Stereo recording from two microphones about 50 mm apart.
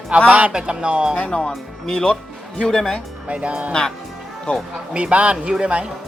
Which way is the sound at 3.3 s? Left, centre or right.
Right.